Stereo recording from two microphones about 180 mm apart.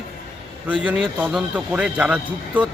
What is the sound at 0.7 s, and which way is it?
A man's voice, 5° right (ahead or behind).